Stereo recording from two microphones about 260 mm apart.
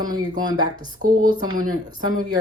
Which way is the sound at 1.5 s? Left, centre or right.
Centre.